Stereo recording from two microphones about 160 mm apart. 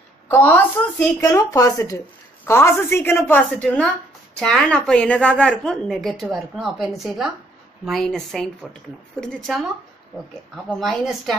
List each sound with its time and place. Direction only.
0.3 s a woman's voice: 15° left (ahead or behind)